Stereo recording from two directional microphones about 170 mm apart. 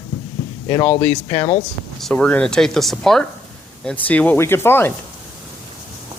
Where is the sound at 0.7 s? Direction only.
25° left (ahead or behind).